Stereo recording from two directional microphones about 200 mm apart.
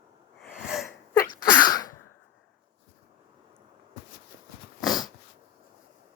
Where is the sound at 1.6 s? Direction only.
20° left (ahead or behind).